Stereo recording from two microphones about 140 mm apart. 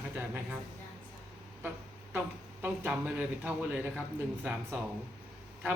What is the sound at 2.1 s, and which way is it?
Speech, 15° right (ahead or behind).